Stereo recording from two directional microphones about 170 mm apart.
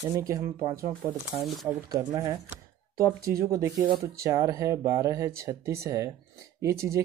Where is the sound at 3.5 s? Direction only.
20° right (ahead or behind).